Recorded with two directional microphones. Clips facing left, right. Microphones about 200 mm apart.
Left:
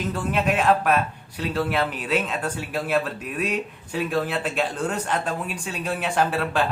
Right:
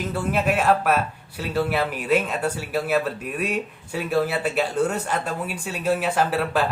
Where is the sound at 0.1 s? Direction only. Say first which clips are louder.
Right 1 dB; 10° right (ahead or behind).